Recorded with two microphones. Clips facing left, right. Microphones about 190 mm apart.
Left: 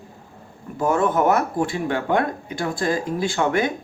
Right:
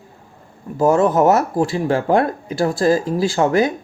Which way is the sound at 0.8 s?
35° right (ahead or behind).